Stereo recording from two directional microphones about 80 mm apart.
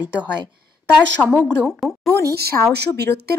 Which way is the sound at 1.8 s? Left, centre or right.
Centre.